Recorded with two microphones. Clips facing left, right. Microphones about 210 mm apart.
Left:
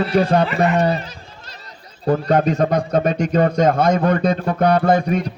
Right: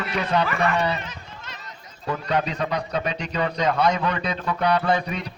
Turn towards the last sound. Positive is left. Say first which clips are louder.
# left 7 dB
turn(degrees=45)  # may be behind; listen again after turning